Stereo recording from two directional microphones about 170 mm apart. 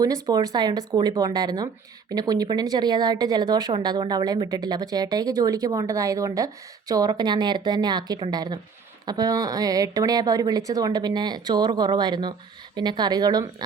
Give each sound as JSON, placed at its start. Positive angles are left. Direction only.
{"t": 0.0, "sound": "speech", "side_deg": -20}